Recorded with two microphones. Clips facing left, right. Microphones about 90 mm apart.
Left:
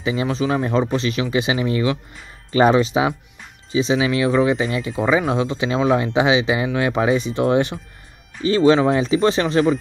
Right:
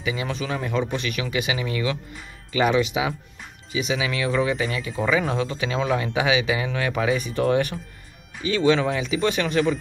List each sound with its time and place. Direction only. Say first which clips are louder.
0.0 s speech: left 7 dB; 30° left (ahead or behind)
8.5 s speech: left 6 dB; 35° left (ahead or behind)